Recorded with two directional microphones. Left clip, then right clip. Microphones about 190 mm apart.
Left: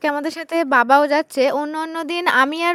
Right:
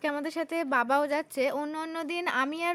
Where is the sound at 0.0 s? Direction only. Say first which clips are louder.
Left 9 dB; 45° left (ahead or behind).